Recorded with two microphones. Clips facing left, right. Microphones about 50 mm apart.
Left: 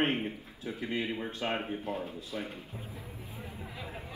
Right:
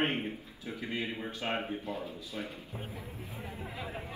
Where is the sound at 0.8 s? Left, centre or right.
Left.